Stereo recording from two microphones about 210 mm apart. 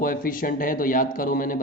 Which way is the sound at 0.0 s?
40° left (ahead or behind).